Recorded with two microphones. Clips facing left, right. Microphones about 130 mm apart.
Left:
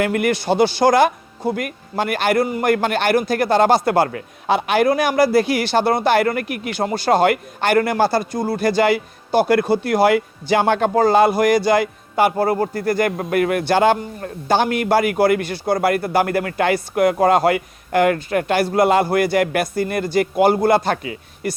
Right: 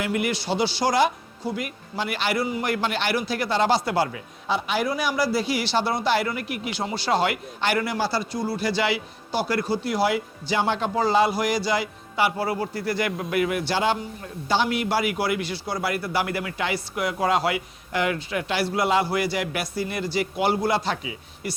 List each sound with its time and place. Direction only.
0.0 s speech: 55° left (ahead or behind)